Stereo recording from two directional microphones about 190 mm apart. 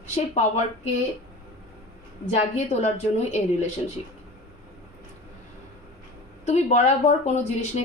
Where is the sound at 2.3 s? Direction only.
35° left (ahead or behind).